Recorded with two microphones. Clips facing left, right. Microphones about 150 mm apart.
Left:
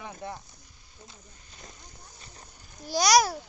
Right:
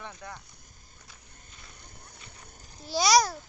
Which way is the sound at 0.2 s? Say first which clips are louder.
Left 8 dB; 25° left (ahead or behind).